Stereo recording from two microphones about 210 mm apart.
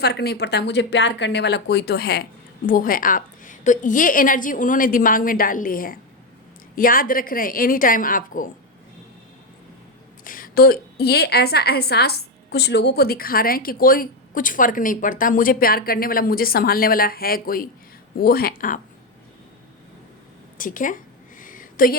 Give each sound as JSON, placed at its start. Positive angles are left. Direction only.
{"t": 0.0, "sound": "a woman's voice", "side_deg": 50}
{"t": 10.2, "sound": "a woman's voice", "side_deg": 40}
{"t": 20.6, "sound": "a sound", "side_deg": 40}